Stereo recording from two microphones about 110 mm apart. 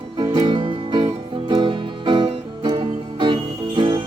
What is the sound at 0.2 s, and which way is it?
Music, 40° right (ahead or behind).